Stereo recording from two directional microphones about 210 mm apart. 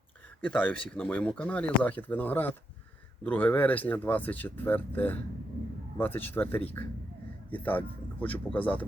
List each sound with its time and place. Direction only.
0.9 s speech: 5° left (ahead or behind)